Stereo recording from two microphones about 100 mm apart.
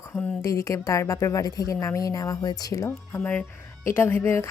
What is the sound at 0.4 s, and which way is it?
A woman's voice, 30° left (ahead or behind).